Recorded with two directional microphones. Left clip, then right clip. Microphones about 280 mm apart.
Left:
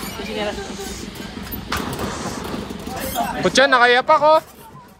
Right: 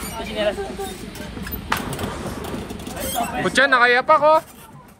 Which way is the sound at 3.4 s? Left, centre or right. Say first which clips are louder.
Left 2 dB; centre.